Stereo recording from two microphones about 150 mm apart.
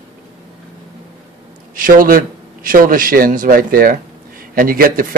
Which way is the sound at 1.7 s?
65° right (ahead or behind).